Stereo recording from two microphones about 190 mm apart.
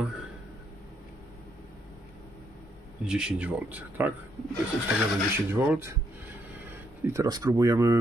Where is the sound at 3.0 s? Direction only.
5° right (ahead or behind).